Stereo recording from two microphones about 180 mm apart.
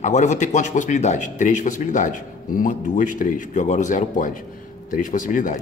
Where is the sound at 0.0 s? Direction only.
40° left (ahead or behind).